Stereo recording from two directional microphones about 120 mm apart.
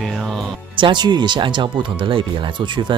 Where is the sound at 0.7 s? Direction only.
40° right (ahead or behind).